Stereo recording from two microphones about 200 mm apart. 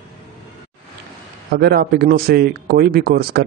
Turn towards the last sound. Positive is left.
turn(degrees=-50)  # may be behind; listen again after turning